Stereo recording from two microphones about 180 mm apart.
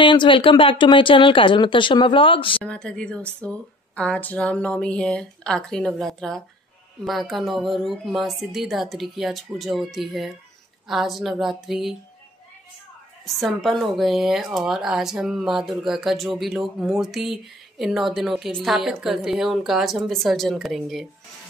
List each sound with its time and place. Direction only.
0.0 s speech: 25° left (ahead or behind)
2.6 s a woman's voice: 5° left (ahead or behind)
13.2 s a woman's voice: centre (ahead or behind)